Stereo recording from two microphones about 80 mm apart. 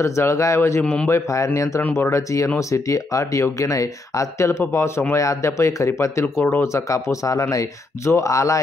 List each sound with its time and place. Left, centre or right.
0.0 s speech: left